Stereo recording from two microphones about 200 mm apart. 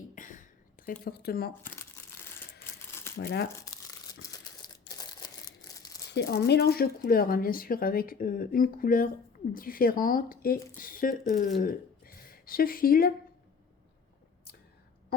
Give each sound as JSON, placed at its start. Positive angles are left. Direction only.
{"t": 0.1, "sound": "a sound", "side_deg": 40}
{"t": 1.0, "sound": "speech", "side_deg": 50}
{"t": 1.6, "sound": "crumpling", "side_deg": 10}
{"t": 3.2, "sound": "speech", "side_deg": 50}
{"t": 3.5, "sound": "tearing", "side_deg": 15}
{"t": 4.9, "sound": "a sound", "side_deg": 20}
{"t": 6.1, "sound": "speech", "side_deg": 55}